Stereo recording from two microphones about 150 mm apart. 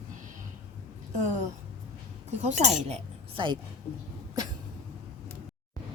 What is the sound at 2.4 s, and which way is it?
Speech, 50° right (ahead or behind).